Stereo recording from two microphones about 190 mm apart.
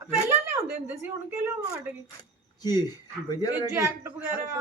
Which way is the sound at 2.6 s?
20° left (ahead or behind).